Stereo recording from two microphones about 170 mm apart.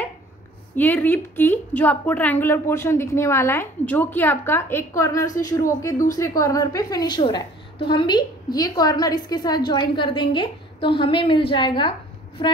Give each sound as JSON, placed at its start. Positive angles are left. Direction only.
{"t": 0.7, "sound": "a woman's voice", "side_deg": 10}